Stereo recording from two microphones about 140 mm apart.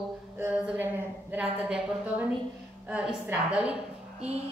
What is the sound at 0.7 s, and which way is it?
A woman's voice, 15° right (ahead or behind).